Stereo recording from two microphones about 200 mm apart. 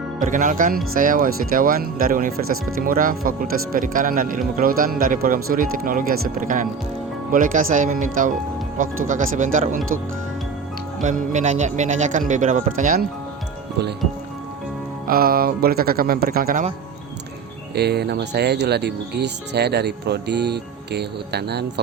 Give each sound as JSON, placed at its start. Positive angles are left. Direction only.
{"t": 0.2, "sound": "speech", "side_deg": -40}
{"t": 11.0, "sound": "speech", "side_deg": -40}
{"t": 15.0, "sound": "speech", "side_deg": -45}
{"t": 17.7, "sound": "speech", "side_deg": -55}